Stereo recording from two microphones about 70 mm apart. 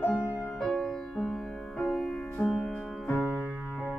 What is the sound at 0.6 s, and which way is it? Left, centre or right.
Music, centre.